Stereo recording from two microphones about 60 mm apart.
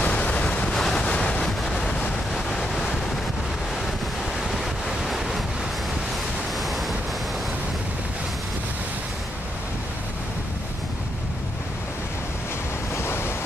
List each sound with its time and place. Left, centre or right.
0.0 s waves: left
0.7 s waves: centre
1.0 s waves: centre
4.5 s waves: centre
6.6 s waves: centre
12.9 s waves: left